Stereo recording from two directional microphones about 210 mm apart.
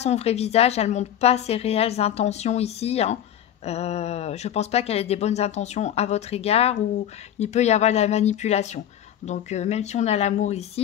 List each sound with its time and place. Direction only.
0.0 s speech: 30° left (ahead or behind)